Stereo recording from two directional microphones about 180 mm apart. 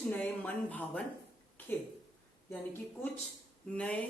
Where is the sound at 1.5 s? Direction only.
10° left (ahead or behind).